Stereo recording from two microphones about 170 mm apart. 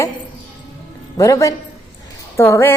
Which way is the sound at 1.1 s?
20° left (ahead or behind).